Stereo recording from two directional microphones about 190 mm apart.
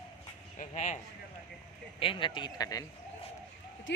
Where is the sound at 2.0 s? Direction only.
25° left (ahead or behind).